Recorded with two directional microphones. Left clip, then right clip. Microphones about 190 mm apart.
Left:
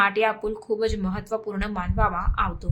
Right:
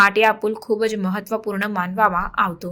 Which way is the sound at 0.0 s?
20° right (ahead or behind).